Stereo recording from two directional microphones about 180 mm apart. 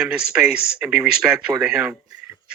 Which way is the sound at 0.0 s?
5° right (ahead or behind).